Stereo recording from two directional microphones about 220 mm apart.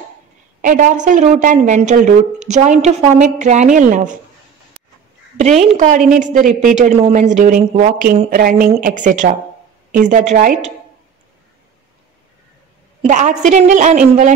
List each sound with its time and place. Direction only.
0.6 s a woman's voice: 35° right (ahead or behind)
5.4 s a woman's voice: 30° right (ahead or behind)
13.0 s a woman's voice: 35° right (ahead or behind)